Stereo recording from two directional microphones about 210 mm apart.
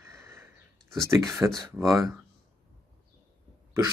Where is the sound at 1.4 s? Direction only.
10° right (ahead or behind).